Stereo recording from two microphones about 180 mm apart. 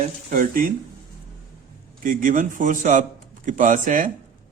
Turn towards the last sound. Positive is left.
turn(degrees=-50)  # may be behind; listen again after turning